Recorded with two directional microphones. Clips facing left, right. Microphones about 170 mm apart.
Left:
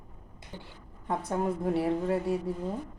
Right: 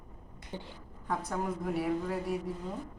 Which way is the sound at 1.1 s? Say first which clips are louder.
Left 4 dB; 25° left (ahead or behind).